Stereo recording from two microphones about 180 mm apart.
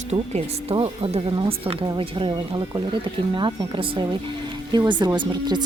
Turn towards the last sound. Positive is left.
turn(degrees=-25)  # may be behind; listen again after turning